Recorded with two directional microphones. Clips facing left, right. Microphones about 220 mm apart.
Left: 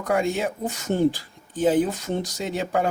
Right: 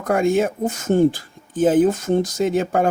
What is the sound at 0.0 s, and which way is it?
Speech, 50° right (ahead or behind).